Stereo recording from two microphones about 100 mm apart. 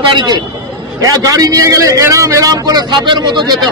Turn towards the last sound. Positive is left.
turn(degrees=-45)  # may be behind; listen again after turning